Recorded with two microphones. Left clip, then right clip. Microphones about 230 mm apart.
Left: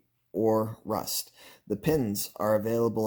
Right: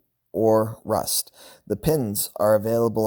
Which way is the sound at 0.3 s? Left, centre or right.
Right.